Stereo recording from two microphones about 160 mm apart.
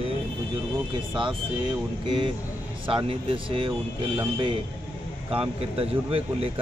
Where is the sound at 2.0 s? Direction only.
35° right (ahead or behind).